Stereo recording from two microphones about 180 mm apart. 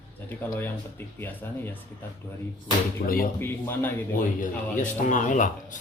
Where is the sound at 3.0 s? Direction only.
50° left (ahead or behind).